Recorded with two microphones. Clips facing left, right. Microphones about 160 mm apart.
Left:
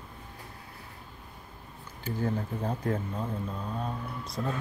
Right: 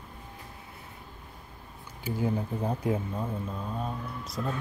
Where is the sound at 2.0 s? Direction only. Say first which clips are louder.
Right 1 dB; 10° right (ahead or behind).